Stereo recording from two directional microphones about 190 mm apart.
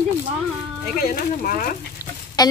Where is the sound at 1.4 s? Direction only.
45° left (ahead or behind).